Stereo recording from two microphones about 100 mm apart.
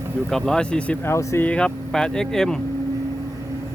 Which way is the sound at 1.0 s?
30° left (ahead or behind).